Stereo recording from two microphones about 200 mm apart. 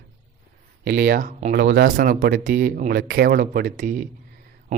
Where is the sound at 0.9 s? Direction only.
50° right (ahead or behind).